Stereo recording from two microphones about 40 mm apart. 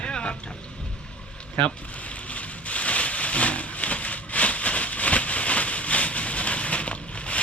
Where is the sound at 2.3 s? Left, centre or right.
Left.